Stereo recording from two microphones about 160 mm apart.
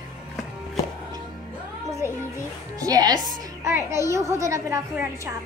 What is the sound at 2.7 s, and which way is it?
A woman's voice, 25° right (ahead or behind).